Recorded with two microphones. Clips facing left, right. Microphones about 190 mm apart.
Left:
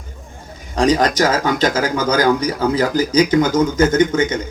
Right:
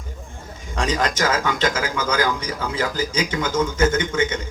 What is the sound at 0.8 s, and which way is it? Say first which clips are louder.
A man's voice: left 7 dB; 35° left (ahead or behind).